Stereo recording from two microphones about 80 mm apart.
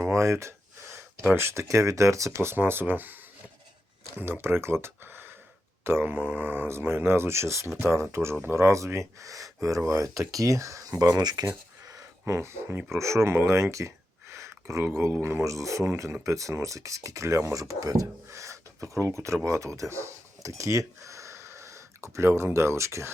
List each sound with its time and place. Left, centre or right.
0.0 s a sound: right
1.4 s speech: right
4.2 s speech: right
11.2 s speech: right
12.2 s speech: right